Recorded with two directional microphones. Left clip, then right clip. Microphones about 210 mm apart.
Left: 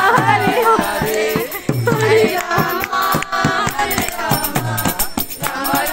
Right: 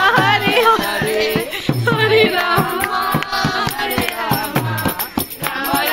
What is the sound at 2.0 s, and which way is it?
Music, 10° left (ahead or behind).